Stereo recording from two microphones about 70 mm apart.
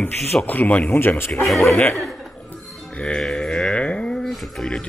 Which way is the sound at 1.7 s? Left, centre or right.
Centre.